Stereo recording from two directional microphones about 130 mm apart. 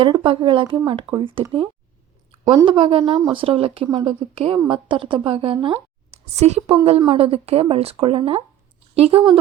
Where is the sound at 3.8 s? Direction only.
35° right (ahead or behind).